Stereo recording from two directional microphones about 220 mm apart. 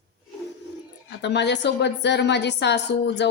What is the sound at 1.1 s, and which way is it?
Speech, 50° left (ahead or behind).